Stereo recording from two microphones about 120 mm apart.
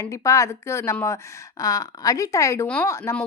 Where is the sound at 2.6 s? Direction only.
10° left (ahead or behind).